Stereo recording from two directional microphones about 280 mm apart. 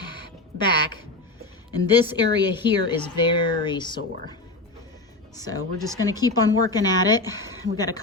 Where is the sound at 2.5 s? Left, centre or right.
Centre.